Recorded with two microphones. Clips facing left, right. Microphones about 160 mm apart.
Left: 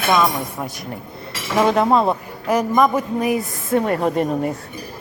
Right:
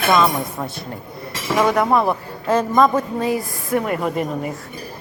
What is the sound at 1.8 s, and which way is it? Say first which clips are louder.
A man's voice: left 1 dB; 20° left (ahead or behind).